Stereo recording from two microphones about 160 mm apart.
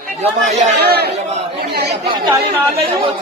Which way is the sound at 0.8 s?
85° right.